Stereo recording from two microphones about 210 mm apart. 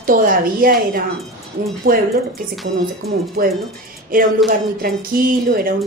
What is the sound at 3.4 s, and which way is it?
A woman's voice, 45° right (ahead or behind).